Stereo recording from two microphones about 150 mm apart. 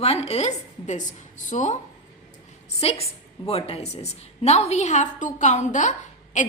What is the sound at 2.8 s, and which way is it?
A woman's voice, 45° left (ahead or behind).